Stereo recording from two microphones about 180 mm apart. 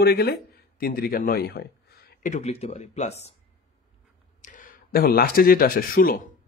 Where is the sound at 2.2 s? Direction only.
40° left (ahead or behind).